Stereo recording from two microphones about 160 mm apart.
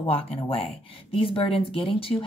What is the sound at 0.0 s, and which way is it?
Speech, 35° left (ahead or behind).